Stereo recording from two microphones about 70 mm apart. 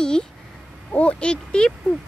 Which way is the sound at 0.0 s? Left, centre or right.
Centre.